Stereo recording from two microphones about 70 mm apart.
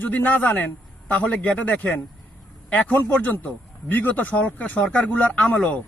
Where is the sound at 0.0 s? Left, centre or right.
Left.